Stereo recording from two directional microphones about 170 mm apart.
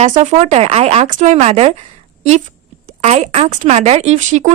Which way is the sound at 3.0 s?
40° right (ahead or behind).